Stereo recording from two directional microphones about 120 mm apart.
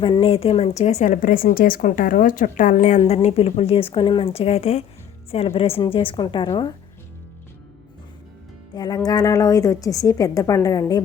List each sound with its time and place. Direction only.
0.0 s speech: 50° left (ahead or behind)
0.8 s a woman's voice: 75° left (ahead or behind); by 6.7 s 40° left (ahead or behind)
8.7 s a woman's voice: 35° left (ahead or behind)